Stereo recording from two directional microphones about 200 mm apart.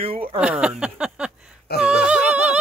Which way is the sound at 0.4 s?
5° right (ahead or behind).